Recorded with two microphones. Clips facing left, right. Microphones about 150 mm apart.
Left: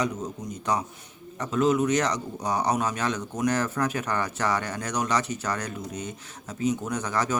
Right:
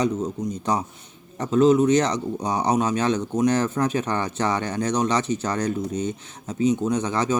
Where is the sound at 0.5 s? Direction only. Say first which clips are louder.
Right 3 dB; 30° right (ahead or behind).